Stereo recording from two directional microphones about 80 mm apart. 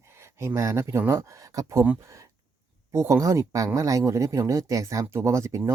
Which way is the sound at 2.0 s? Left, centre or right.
Right.